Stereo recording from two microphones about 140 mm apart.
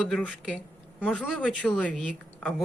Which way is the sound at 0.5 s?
5° left (ahead or behind).